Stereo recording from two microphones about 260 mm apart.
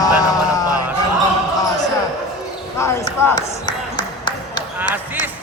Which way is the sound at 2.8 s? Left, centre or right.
Centre.